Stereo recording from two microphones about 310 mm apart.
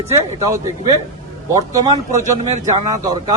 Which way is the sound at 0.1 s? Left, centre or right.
Centre.